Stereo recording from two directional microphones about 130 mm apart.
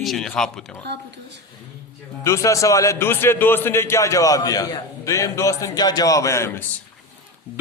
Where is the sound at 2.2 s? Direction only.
25° left (ahead or behind).